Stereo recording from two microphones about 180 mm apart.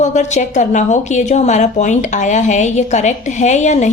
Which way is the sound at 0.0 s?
40° left (ahead or behind).